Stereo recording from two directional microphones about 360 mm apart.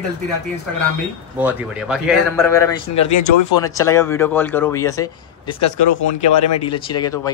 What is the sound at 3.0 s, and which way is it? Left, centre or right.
Speech, left.